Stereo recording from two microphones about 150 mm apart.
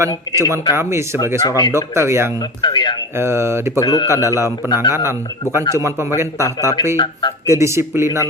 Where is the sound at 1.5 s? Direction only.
25° left (ahead or behind).